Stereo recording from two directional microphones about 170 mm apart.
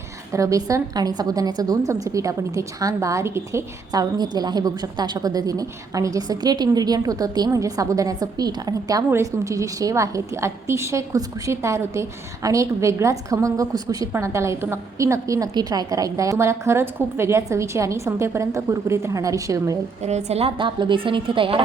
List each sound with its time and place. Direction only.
0.3 s a woman's voice: 20° right (ahead or behind)
20.0 s a woman's voice: 40° right (ahead or behind)